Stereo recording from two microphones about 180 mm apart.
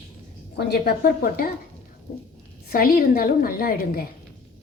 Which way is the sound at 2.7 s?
55° left (ahead or behind).